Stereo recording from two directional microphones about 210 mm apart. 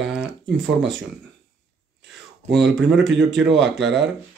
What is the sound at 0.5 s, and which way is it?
Speech, 60° right (ahead or behind).